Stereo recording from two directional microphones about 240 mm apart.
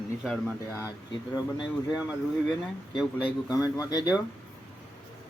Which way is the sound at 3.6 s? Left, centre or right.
Centre.